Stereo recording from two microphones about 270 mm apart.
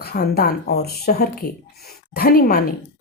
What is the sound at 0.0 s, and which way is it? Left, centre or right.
Speech, left.